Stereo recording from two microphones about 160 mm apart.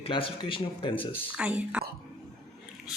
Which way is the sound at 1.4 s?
10° right (ahead or behind).